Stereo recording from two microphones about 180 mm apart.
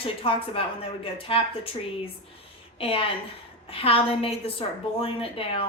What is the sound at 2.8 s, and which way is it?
A woman's voice, 30° left (ahead or behind).